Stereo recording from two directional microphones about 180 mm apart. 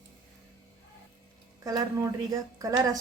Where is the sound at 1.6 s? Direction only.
20° right (ahead or behind).